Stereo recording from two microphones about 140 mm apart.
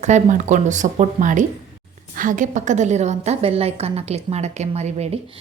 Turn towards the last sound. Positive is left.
turn(degrees=-50)  # may be behind; listen again after turning